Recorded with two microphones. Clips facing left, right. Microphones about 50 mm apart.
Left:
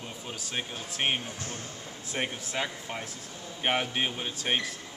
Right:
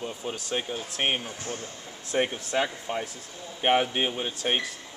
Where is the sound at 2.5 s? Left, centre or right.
Centre.